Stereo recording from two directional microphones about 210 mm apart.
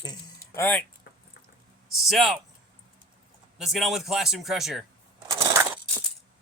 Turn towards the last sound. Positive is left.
turn(degrees=-15)  # may be behind; listen again after turning